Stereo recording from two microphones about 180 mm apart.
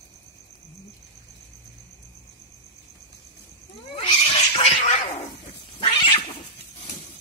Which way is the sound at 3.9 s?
35° left (ahead or behind).